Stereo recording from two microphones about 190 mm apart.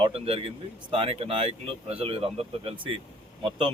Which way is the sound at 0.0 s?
30° right (ahead or behind).